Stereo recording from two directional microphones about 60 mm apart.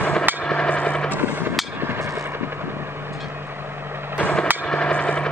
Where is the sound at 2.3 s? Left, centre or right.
Right.